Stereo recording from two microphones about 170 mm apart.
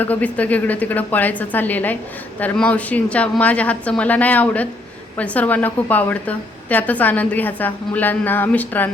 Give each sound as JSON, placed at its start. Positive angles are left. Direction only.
{"t": 0.0, "sound": "a woman's voice", "side_deg": 10}